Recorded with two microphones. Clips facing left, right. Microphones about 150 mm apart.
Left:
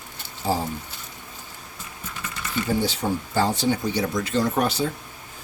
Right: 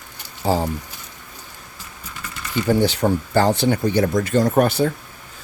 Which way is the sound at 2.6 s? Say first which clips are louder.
Right 7 dB; 70° right (ahead or behind).